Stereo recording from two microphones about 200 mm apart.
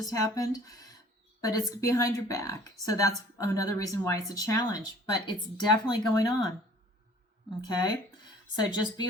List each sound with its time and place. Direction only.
0.0 s a woman's voice: 20° left (ahead or behind)
7.6 s speech: 20° left (ahead or behind)